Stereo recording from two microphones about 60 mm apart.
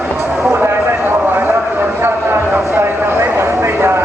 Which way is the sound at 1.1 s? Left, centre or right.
Right.